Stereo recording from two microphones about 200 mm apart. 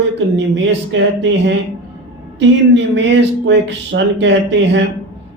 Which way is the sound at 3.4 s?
65° right (ahead or behind).